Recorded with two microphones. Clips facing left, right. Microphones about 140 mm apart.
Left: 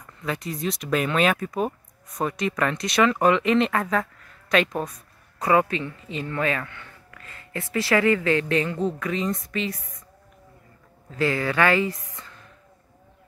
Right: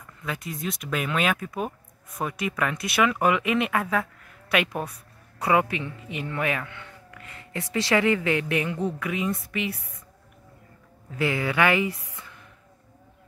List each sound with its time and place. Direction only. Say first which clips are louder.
0.2 s a man's voice: left 4 dB; centre (ahead or behind)
11.1 s speech: left 2 dB; 15° right (ahead or behind)